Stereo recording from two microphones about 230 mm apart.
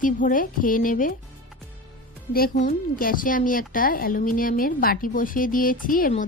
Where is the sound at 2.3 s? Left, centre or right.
Left.